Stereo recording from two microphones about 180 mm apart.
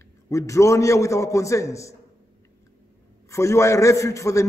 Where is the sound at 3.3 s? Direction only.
15° left (ahead or behind).